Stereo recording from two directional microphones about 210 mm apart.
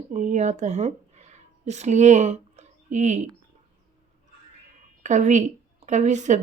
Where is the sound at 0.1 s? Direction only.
35° right (ahead or behind).